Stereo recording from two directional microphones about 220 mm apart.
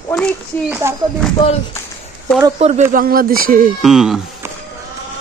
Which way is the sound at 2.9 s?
40° right (ahead or behind).